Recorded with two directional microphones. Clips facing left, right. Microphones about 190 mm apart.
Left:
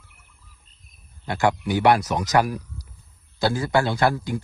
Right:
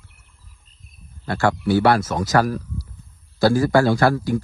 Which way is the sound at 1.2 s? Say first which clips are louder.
Right 3 dB; 15° left (ahead or behind).